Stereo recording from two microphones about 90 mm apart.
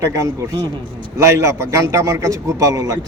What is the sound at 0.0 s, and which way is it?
A man's voice, 35° right (ahead or behind).